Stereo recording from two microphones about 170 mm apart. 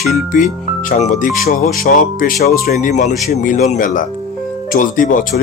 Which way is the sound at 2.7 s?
45° left (ahead or behind).